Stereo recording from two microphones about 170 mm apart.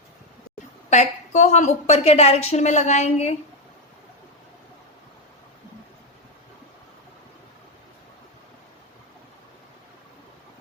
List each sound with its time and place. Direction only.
0.9 s a woman's voice: 45° left (ahead or behind)